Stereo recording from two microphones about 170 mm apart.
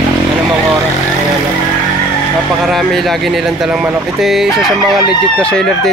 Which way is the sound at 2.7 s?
Centre (ahead or behind).